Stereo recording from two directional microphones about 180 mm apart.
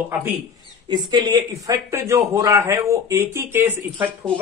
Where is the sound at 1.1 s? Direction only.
25° right (ahead or behind).